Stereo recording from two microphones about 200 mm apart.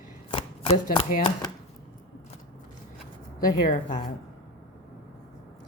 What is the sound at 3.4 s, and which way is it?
Speech, 40° left (ahead or behind).